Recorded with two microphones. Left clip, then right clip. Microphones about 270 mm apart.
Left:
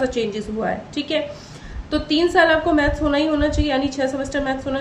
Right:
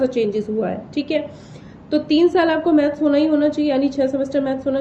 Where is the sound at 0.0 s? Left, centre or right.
Centre.